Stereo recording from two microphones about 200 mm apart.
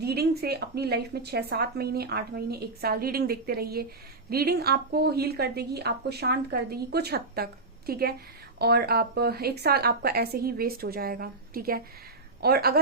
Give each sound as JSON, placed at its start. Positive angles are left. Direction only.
{"t": 0.0, "sound": "speech", "side_deg": -50}